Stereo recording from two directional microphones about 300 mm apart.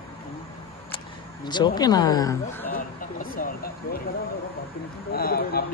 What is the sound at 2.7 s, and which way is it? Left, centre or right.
Speech, left.